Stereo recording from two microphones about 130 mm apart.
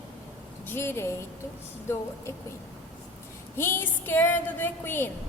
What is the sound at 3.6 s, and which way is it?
A woman's voice, 15° left (ahead or behind).